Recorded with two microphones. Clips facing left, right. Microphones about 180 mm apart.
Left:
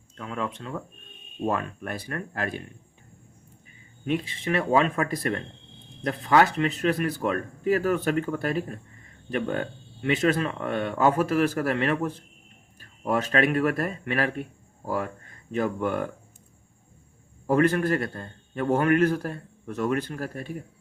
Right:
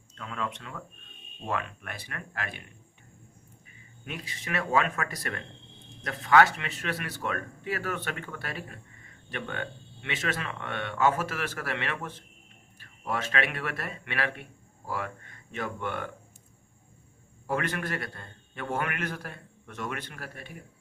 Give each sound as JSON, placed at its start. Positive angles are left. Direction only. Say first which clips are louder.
{"t": 0.2, "sound": "a man's voice", "louder": "left 4 dB", "side_deg": 30}
{"t": 4.0, "sound": "a man's voice", "louder": "left 12 dB", "side_deg": 30}
{"t": 17.4, "sound": "a man's voice", "louder": "left 10 dB", "side_deg": 35}